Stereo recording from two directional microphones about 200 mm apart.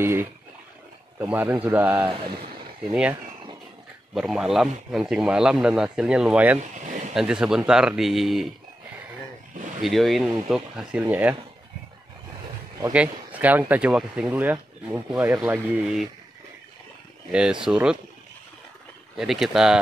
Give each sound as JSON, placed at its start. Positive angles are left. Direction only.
{"t": 0.0, "sound": "a man's voice", "side_deg": -10}
{"t": 6.6, "sound": "a sound", "side_deg": -40}
{"t": 7.2, "sound": "a man's voice", "side_deg": -5}
{"t": 9.8, "sound": "a man's voice", "side_deg": 0}
{"t": 12.9, "sound": "speech", "side_deg": -5}
{"t": 17.3, "sound": "a man's voice", "side_deg": -5}
{"t": 19.1, "sound": "a man's voice", "side_deg": 0}